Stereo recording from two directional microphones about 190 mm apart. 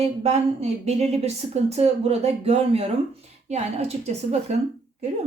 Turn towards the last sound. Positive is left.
turn(degrees=-35)  # may be behind; listen again after turning